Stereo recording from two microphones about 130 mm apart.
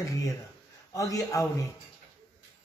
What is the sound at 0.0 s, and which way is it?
A man's voice, 25° left (ahead or behind).